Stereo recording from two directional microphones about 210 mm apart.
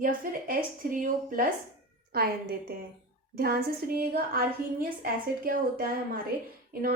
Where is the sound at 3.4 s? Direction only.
45° right (ahead or behind).